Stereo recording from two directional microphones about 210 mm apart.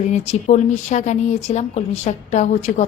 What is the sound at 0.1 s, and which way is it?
A woman's voice, 35° left (ahead or behind).